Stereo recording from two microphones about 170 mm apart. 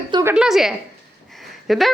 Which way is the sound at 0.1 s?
20° right (ahead or behind).